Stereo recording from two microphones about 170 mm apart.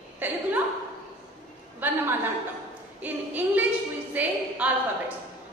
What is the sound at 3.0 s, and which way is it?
A woman's voice, 10° right (ahead or behind).